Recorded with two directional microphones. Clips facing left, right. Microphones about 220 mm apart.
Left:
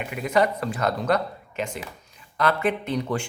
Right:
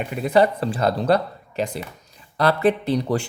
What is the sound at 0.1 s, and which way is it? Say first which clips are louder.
Speech: right 4 dB; 35° right (ahead or behind).